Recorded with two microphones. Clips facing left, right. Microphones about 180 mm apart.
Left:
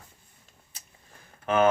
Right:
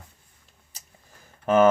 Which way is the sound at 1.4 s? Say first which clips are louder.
Right 4 dB; 45° right (ahead or behind).